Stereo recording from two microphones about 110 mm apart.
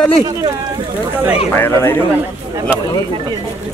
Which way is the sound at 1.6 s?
20° left (ahead or behind).